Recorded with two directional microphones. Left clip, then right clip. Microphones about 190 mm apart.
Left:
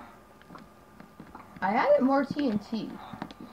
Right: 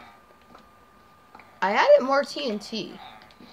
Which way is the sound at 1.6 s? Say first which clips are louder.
Right 6 dB; 40° right (ahead or behind).